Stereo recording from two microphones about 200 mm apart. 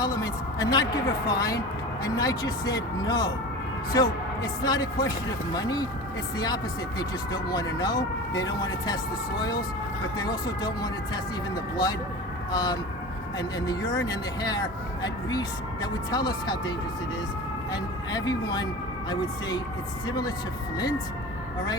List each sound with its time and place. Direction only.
0.0 s speech: 20° left (ahead or behind)
12.5 s speech: 20° left (ahead or behind)